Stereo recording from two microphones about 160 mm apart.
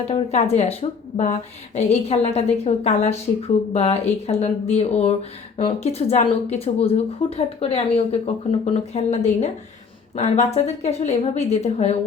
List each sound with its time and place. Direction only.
0.1 s a woman's voice: 45° left (ahead or behind)